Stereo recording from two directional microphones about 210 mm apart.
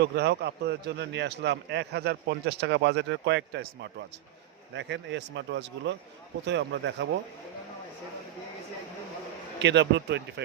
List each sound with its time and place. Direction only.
0.0 s a man's voice: 50° right (ahead or behind)
9.6 s a man's voice: 55° right (ahead or behind)